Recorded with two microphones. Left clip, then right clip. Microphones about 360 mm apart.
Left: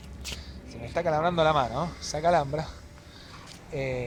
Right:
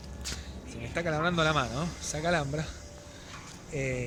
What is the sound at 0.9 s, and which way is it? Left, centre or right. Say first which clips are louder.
Speech: left 4 dB; centre.